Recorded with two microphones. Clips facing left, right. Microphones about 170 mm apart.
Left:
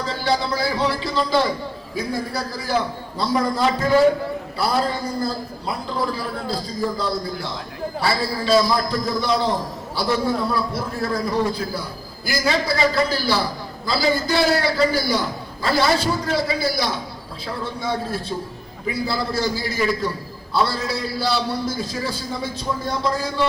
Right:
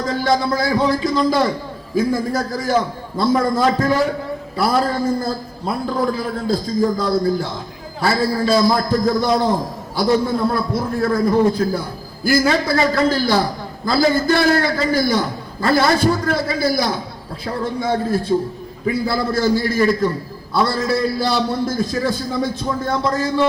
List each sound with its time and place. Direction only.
0.0 s a man's voice: 45° right (ahead or behind)